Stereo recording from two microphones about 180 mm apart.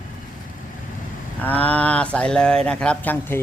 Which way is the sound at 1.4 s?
10° left (ahead or behind).